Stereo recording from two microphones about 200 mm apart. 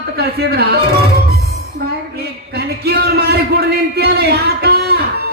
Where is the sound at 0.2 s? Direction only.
55° right (ahead or behind).